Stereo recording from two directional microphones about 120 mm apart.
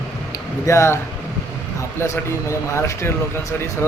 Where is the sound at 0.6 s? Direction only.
25° left (ahead or behind).